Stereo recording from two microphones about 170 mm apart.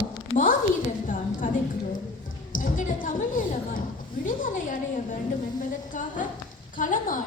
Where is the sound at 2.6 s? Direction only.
50° left (ahead or behind).